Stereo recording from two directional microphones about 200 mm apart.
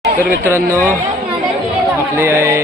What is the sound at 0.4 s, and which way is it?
Speech, 10° right (ahead or behind).